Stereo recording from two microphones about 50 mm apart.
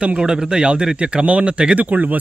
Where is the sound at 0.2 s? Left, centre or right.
Centre.